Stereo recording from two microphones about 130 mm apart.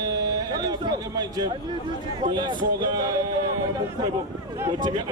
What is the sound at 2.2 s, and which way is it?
Speech, 35° right (ahead or behind).